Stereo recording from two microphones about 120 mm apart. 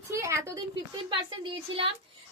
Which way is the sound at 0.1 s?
25° right (ahead or behind).